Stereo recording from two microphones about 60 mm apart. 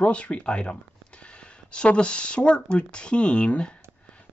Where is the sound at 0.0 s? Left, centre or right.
Centre.